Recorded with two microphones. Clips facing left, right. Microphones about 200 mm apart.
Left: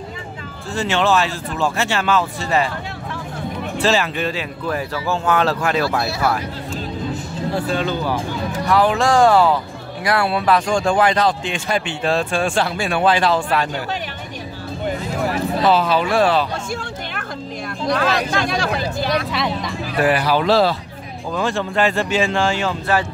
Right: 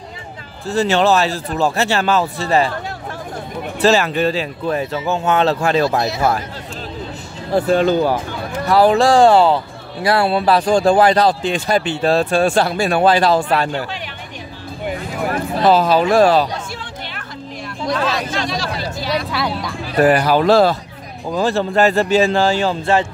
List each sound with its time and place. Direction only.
0.7 s speech: 40° right (ahead or behind)
3.7 s speech: 40° right (ahead or behind); by 6.3 s 20° right (ahead or behind)
7.6 s speech: 45° right (ahead or behind)
8.6 s speech: 35° right (ahead or behind)
15.3 s speech: 45° right (ahead or behind)
17.9 s speech: 55° left (ahead or behind)
19.3 s speech: centre (ahead or behind)
19.9 s speech: 45° right (ahead or behind)
21.4 s speech: 35° right (ahead or behind)